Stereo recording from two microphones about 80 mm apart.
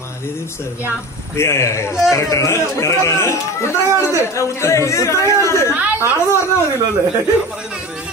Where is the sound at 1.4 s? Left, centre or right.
Left.